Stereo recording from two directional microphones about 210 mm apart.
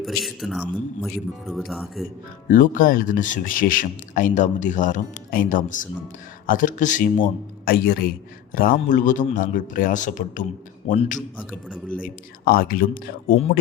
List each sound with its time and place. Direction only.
0.0 s speech: centre (ahead or behind)
2.5 s speech: 40° left (ahead or behind)